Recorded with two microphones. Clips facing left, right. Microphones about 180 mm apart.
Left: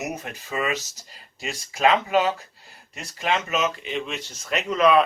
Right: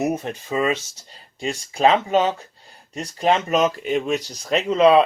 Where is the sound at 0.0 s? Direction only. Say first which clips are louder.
Right 8 dB; 30° right (ahead or behind).